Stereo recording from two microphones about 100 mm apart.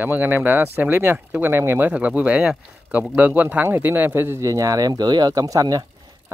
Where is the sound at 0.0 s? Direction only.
20° right (ahead or behind); by 5.9 s 40° right (ahead or behind).